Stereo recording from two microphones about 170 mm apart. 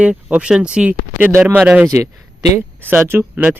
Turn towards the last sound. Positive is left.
turn(degrees=-10)  # may be behind; listen again after turning